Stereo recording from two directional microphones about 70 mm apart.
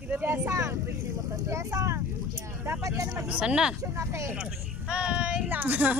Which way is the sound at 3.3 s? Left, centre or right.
Centre.